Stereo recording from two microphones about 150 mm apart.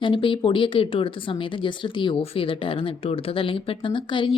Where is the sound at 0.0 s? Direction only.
35° left (ahead or behind).